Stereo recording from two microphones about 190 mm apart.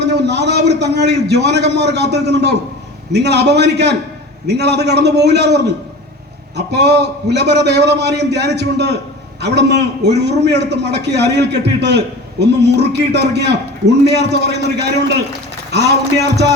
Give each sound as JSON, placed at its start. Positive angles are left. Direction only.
{"t": 0.0, "sound": "a man's voice", "side_deg": -60}
{"t": 6.6, "sound": "a man's voice", "side_deg": -60}